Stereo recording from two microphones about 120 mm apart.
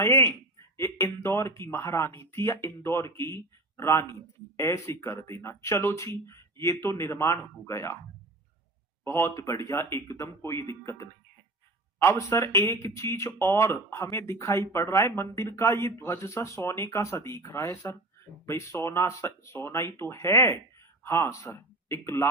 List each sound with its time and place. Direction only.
0.0 s speech: 25° left (ahead or behind)
9.0 s speech: 25° left (ahead or behind)